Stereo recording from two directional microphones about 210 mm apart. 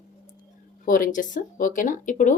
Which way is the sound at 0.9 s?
40° left (ahead or behind).